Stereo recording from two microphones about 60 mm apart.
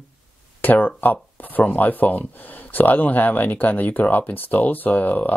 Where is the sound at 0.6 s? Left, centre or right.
Left.